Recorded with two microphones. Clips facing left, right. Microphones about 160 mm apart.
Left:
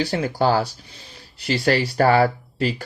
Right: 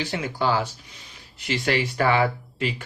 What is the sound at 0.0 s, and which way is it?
Speech, 40° left (ahead or behind).